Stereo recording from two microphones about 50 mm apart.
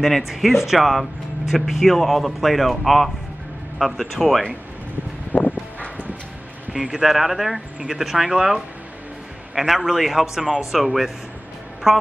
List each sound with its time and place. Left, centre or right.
0.0 s speech: centre
5.3 s a sound: left
6.7 s speech: centre